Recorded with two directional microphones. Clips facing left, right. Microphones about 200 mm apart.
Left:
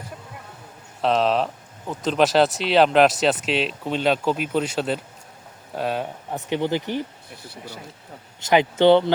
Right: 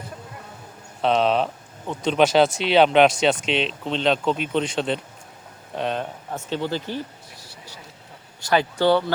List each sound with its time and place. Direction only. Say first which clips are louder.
1.0 s speech: even; centre (ahead or behind)
6.3 s speech: left 3 dB; 15° left (ahead or behind)
7.4 s speech: left 10 dB; 55° left (ahead or behind)
8.4 s speech: left 3 dB; 20° left (ahead or behind)